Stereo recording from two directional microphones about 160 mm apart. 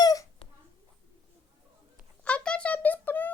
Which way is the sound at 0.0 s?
20° left (ahead or behind).